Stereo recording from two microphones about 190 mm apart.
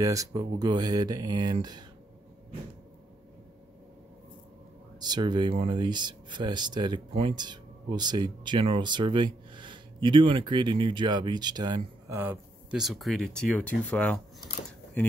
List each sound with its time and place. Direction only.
0.0 s speech: 15° right (ahead or behind)
5.0 s speech: 25° right (ahead or behind)
12.2 s speech: 5° right (ahead or behind)